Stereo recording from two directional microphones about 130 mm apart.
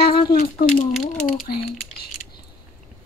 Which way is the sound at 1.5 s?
90° left.